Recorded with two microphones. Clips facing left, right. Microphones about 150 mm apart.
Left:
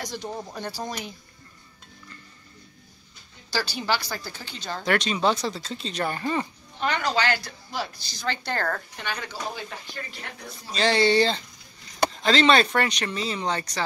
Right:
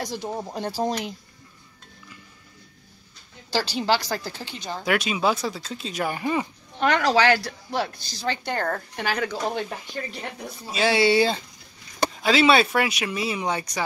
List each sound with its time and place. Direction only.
0.3 s speech: 30° right (ahead or behind)
3.5 s speech: 35° right (ahead or behind)
4.6 s speech: 10° right (ahead or behind)
6.8 s a woman's voice: 80° right; by 8.1 s 60° right (ahead or behind)
8.3 s speech: 20° right (ahead or behind)
8.9 s speech: 65° right (ahead or behind)
10.7 s speech: 10° right (ahead or behind)